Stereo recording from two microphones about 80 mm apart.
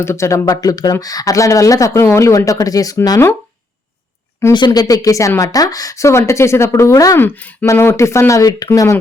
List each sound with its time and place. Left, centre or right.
0.0 s speech: left
0.5 s speech: left
4.5 s speech: left
7.2 s speech: left